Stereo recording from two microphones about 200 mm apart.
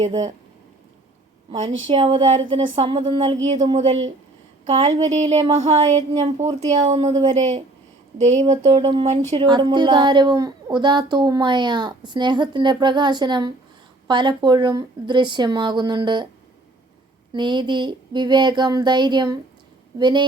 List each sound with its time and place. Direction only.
1.9 s a woman's voice: 25° right (ahead or behind)
3.6 s a woman's voice: 20° right (ahead or behind)
4.9 s a woman's voice: 35° right (ahead or behind)
17.3 s a woman's voice: 20° right (ahead or behind)